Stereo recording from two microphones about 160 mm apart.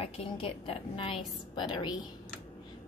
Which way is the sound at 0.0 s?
35° left (ahead or behind).